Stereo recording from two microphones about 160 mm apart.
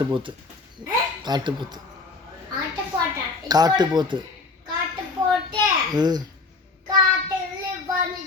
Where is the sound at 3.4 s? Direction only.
25° right (ahead or behind).